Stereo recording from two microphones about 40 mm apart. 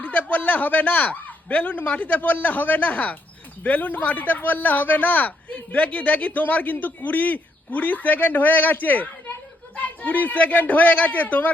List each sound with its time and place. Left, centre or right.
0.0 s a man's voice: left